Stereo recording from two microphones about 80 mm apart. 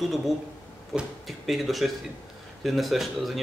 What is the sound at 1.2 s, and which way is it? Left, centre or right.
Speech, centre.